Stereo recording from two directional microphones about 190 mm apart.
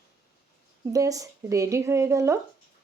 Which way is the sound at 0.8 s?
15° right (ahead or behind).